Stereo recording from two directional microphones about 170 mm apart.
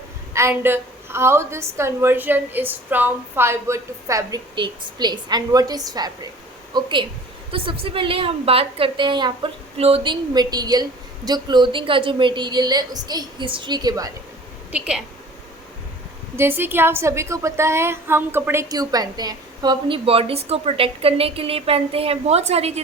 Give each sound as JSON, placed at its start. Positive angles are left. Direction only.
{"t": 0.3, "sound": "a woman's voice", "side_deg": -15}
{"t": 14.7, "sound": "a woman's voice", "side_deg": -5}
{"t": 16.4, "sound": "a woman's voice", "side_deg": -10}